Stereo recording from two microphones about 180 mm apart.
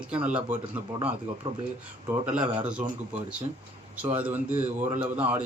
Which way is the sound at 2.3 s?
10° right (ahead or behind).